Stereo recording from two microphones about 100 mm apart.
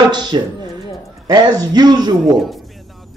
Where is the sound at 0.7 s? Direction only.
Centre (ahead or behind).